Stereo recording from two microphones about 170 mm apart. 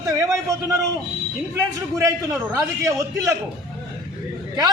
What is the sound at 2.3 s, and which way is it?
A man's voice, 20° right (ahead or behind).